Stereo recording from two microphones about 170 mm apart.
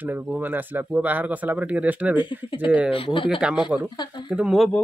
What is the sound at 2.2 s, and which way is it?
Speech, 30° left (ahead or behind).